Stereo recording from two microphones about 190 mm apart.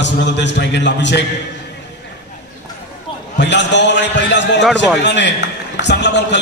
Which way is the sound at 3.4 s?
70° left (ahead or behind).